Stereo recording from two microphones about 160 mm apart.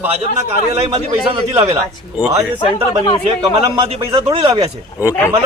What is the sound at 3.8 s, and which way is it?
Speech, 35° right (ahead or behind).